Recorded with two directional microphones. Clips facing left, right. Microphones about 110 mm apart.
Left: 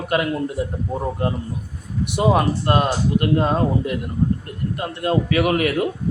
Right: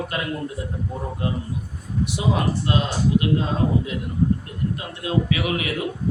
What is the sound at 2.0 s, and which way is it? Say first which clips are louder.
A man's voice: left 5 dB; 55° left (ahead or behind).